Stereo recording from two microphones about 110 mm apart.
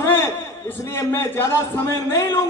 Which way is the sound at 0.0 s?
20° left (ahead or behind).